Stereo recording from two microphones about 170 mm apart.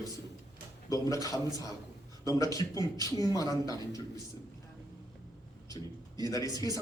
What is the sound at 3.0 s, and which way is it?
Speech, 20° left (ahead or behind).